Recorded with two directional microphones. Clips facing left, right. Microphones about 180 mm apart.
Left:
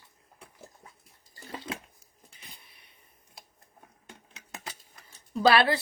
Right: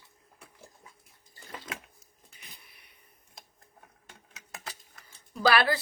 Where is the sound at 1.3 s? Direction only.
30° left (ahead or behind).